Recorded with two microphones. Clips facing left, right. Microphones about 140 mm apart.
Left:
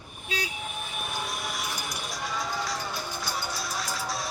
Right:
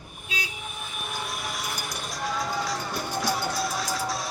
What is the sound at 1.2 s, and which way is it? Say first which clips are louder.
Vehicle: even; centre (ahead or behind).